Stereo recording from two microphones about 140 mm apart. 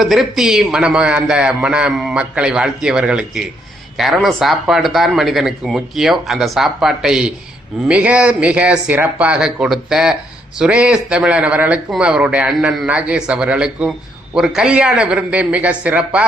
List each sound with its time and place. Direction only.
0.0 s speech: centre (ahead or behind)